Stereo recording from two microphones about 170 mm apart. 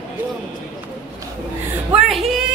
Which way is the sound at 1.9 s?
Centre (ahead or behind).